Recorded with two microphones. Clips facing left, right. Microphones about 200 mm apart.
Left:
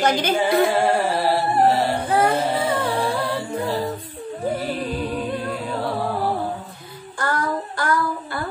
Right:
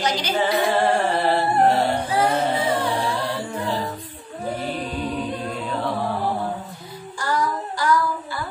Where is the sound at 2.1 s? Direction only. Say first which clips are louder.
Left 1 dB; 55° left (ahead or behind).